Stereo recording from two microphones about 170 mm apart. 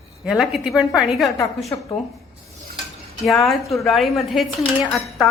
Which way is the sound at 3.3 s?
Centre (ahead or behind).